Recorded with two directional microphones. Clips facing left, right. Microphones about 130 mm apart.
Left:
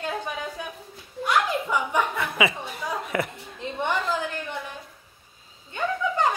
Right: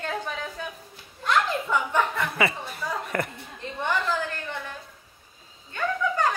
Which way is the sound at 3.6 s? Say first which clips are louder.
Left 4 dB; 20° left (ahead or behind).